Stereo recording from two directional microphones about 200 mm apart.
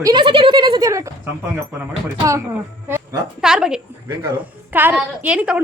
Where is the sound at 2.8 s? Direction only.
10° right (ahead or behind).